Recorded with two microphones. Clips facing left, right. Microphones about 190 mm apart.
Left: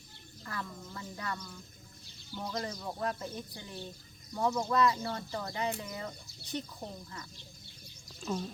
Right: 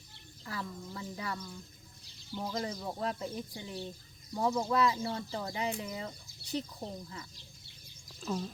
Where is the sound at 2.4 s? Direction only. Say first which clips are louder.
Right 1 dB; 10° right (ahead or behind).